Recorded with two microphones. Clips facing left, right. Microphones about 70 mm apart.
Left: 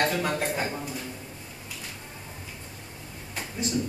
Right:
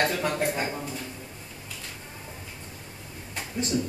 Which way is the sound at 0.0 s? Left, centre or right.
Centre.